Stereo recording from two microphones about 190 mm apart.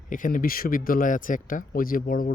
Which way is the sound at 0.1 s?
45° left (ahead or behind).